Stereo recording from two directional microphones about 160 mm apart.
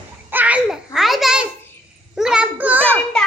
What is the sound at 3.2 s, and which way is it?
Music, 5° left (ahead or behind).